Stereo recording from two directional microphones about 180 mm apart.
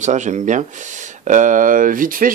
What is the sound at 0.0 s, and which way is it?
Speech, 40° right (ahead or behind).